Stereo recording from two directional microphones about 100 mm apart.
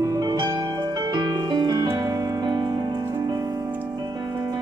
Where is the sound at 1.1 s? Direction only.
45° right (ahead or behind).